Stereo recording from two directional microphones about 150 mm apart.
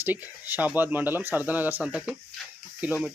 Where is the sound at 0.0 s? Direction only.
15° right (ahead or behind).